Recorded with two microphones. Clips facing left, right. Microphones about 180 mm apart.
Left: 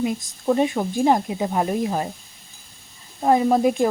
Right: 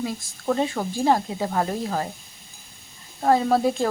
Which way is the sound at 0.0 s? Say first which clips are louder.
Left 5 dB; 20° left (ahead or behind).